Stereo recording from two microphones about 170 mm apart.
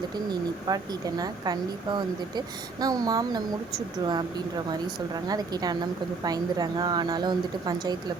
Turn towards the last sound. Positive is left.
turn(degrees=-25)  # may be behind; listen again after turning